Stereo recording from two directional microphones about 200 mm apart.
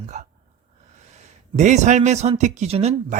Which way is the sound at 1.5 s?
35° right (ahead or behind).